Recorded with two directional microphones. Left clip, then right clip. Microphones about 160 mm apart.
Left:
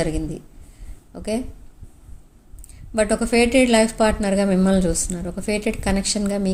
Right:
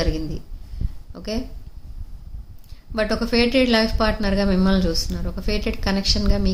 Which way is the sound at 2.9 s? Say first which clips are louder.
Left 2 dB; 15° left (ahead or behind).